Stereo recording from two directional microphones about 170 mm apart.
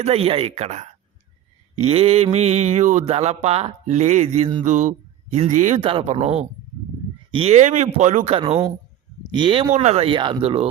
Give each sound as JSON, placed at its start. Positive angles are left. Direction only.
{"t": 0.0, "sound": "speech", "side_deg": -35}
{"t": 4.6, "sound": "speech", "side_deg": -45}
{"t": 5.8, "sound": "speech", "side_deg": -35}